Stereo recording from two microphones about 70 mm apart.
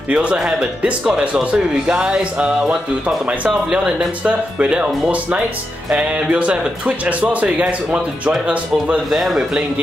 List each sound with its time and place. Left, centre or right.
0.1 s speech: centre
9.1 s speech: centre